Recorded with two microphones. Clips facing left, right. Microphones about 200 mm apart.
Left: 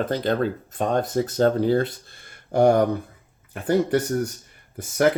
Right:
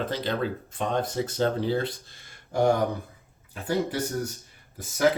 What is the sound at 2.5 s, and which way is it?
Speech, 65° left (ahead or behind).